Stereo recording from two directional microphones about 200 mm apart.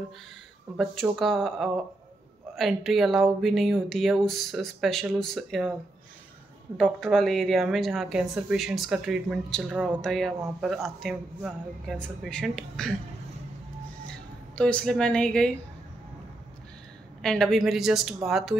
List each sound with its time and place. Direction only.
1.1 s speech: centre (ahead or behind)
6.8 s speech: centre (ahead or behind)
14.0 s speech: 5° left (ahead or behind)
17.2 s speech: centre (ahead or behind)